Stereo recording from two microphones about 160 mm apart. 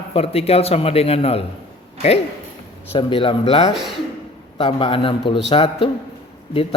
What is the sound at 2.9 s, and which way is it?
Speech, 30° left (ahead or behind).